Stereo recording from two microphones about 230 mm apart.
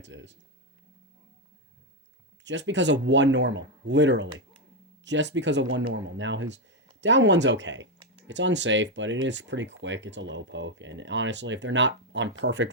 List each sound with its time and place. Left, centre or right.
0.0 s speech: right
2.4 s speech: right